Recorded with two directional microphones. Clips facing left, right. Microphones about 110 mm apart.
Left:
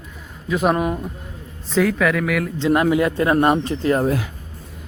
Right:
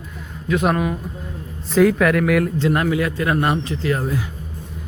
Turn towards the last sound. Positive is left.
turn(degrees=65)  # may be behind; listen again after turning